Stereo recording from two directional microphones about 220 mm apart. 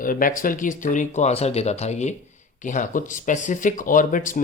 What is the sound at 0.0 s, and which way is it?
Speech, 40° left (ahead or behind).